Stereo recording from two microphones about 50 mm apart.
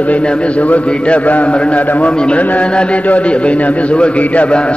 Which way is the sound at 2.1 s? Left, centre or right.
Centre.